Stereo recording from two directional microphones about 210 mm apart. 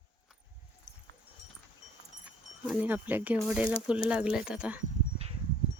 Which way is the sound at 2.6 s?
10° right (ahead or behind).